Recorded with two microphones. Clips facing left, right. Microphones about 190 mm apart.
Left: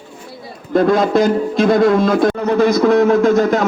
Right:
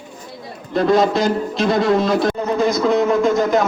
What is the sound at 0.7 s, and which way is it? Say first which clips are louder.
A man's voice: left 2 dB; 50° left (ahead or behind).